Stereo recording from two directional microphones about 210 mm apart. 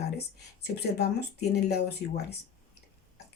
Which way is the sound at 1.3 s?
50° left (ahead or behind).